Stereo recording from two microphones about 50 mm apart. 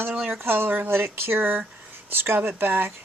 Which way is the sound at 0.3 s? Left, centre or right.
Right.